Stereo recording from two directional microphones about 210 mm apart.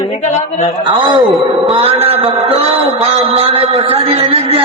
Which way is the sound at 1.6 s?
25° right (ahead or behind).